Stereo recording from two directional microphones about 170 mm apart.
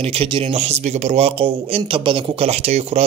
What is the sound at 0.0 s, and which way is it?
Speech, 35° right (ahead or behind).